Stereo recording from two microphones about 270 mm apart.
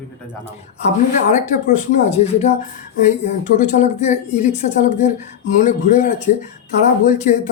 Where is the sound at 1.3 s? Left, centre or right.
Left.